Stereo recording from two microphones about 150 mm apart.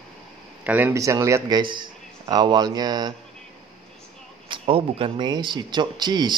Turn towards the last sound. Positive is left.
turn(degrees=-30)  # may be behind; listen again after turning